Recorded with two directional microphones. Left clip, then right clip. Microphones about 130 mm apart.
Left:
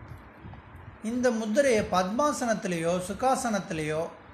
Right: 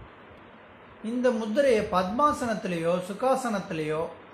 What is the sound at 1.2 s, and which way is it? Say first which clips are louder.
A man's voice: right 1 dB; 15° left (ahead or behind).